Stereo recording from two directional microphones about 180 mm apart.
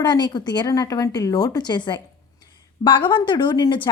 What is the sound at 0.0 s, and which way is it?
A woman's voice, 25° left (ahead or behind).